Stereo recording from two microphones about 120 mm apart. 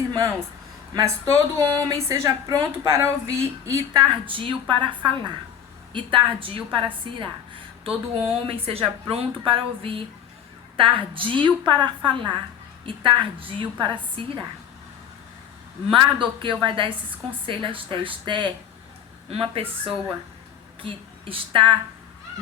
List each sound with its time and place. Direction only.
0.1 s a woman's voice: 25° right (ahead or behind)
4.3 s a woman's voice: 45° right (ahead or behind)
15.9 s a woman's voice: 40° right (ahead or behind)